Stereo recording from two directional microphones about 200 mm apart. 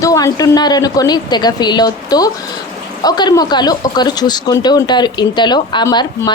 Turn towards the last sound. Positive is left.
turn(degrees=20)  # may be behind; listen again after turning